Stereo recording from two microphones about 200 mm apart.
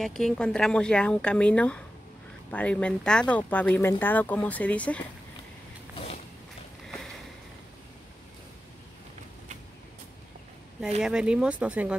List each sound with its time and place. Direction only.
0.0 s speech: centre (ahead or behind)
5.9 s walk: 35° left (ahead or behind)
11.0 s speech: 5° right (ahead or behind)